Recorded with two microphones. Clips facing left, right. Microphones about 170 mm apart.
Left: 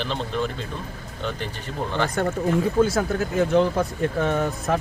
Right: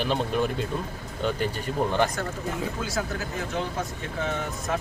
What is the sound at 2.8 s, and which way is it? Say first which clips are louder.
Speech: left 14 dB; 60° left (ahead or behind).